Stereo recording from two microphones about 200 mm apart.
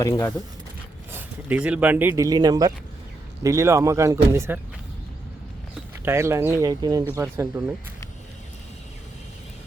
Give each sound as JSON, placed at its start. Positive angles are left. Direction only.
{"t": 0.0, "sound": "speech", "side_deg": 15}
{"t": 1.1, "sound": "speech", "side_deg": -5}
{"t": 6.1, "sound": "speech", "side_deg": -15}